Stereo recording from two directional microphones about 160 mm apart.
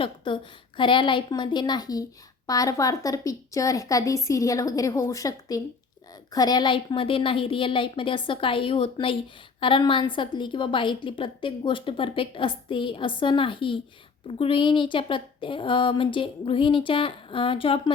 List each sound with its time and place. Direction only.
0.8 s a woman's voice: 30° left (ahead or behind)